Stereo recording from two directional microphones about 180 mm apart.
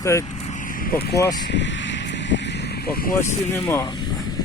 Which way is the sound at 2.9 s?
55° left (ahead or behind).